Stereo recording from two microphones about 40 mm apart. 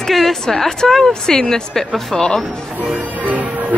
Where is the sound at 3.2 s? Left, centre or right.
Right.